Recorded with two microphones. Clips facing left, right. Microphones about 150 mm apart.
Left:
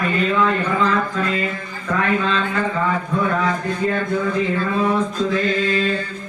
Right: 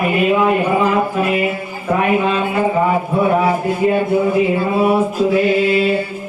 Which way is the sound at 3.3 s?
10° right (ahead or behind).